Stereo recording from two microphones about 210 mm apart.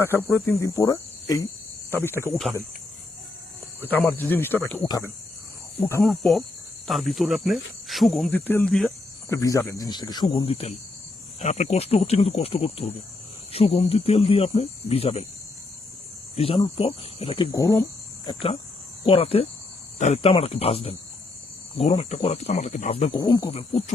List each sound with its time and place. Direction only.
0.2 s speech: 10° left (ahead or behind)
2.3 s speech: centre (ahead or behind)
3.8 s speech: 10° left (ahead or behind)
6.1 s speech: centre (ahead or behind)
9.3 s speech: 15° left (ahead or behind)
16.3 s speech: 25° left (ahead or behind)
18.3 s speech: 25° left (ahead or behind)